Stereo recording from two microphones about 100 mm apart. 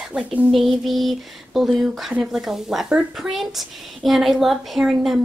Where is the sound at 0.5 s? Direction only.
Centre (ahead or behind).